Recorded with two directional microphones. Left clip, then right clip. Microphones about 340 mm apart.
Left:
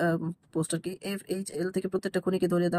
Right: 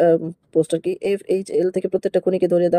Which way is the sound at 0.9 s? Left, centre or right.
Right.